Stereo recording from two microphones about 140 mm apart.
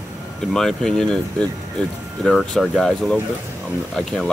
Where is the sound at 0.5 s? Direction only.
5° left (ahead or behind).